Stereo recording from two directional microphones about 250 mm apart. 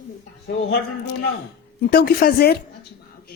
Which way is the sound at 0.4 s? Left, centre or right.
Left.